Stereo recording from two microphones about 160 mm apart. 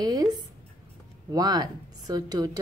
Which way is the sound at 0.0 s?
25° right (ahead or behind).